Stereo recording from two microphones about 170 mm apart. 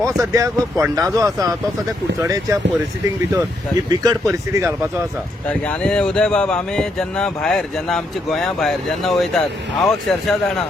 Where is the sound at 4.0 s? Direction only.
20° right (ahead or behind).